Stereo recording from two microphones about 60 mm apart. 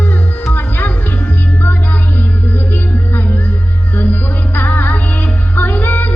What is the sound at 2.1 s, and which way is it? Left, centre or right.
Music, left.